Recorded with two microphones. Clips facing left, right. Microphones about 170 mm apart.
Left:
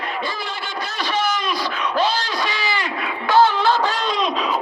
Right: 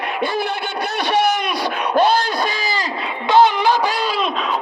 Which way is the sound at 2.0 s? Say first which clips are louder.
Right 6 dB; 60° right (ahead or behind).